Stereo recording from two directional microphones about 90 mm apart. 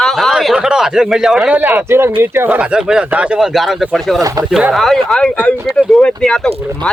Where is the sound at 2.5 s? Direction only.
10° right (ahead or behind).